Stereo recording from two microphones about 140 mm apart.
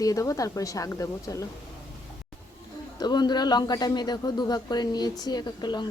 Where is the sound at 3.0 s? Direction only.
30° left (ahead or behind).